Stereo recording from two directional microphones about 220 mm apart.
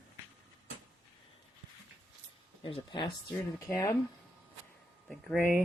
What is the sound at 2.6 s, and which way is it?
Speech, 20° left (ahead or behind).